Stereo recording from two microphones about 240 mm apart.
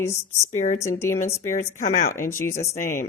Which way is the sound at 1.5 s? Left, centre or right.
Left.